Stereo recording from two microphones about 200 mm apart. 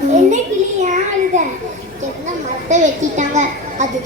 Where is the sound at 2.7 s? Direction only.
35° right (ahead or behind).